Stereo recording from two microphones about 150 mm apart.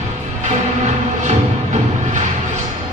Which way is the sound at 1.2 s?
55° right (ahead or behind).